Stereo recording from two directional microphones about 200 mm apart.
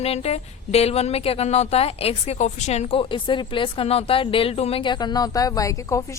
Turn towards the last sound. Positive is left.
turn(degrees=15)  # may be behind; listen again after turning